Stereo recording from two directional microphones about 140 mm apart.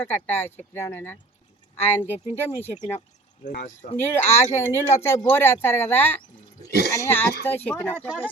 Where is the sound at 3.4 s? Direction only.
65° left (ahead or behind).